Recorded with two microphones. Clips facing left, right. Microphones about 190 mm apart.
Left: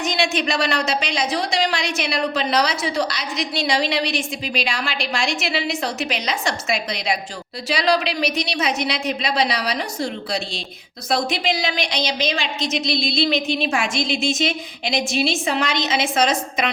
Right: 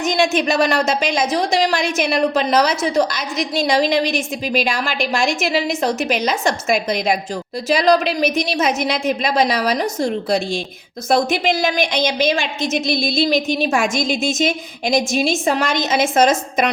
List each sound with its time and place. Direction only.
0.0 s a woman's voice: 45° right (ahead or behind)